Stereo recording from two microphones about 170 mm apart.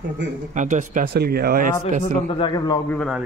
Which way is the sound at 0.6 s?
45° right (ahead or behind).